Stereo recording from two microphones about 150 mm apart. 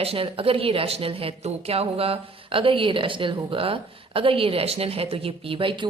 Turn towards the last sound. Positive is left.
turn(degrees=-35)  # may be behind; listen again after turning